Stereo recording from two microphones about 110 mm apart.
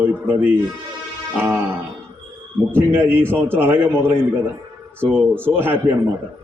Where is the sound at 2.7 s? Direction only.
20° right (ahead or behind).